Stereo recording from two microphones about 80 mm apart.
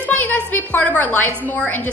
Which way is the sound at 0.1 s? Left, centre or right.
Left.